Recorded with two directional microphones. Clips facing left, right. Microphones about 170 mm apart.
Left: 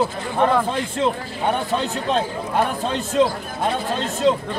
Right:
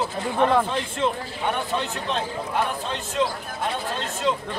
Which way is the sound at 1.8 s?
40° left (ahead or behind).